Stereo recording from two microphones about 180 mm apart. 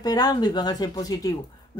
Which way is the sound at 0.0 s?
20° left (ahead or behind).